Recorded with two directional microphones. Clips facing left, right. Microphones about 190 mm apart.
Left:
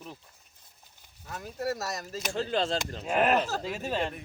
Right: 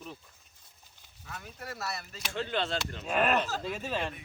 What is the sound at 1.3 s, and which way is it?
Speech, 40° left (ahead or behind).